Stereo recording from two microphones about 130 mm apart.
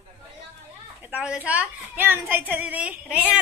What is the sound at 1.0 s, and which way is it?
A woman's voice, 10° right (ahead or behind).